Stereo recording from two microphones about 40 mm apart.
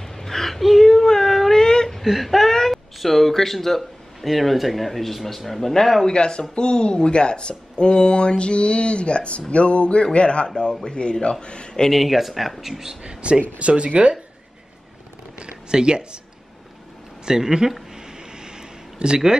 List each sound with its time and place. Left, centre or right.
0.0 s a sound: centre
0.8 s child singing: centre
1.6 s whimper: centre
2.0 s speech: centre
6.0 s speech: left
11.9 s speech: centre
13.0 s speech: right
15.3 s speech: right
17.2 s speech: centre
18.4 s a sound: centre